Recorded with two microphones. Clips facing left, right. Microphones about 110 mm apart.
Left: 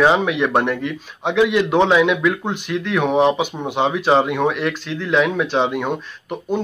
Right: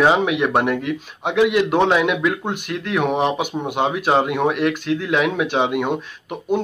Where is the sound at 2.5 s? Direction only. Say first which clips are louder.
Left 3 dB; 50° right (ahead or behind).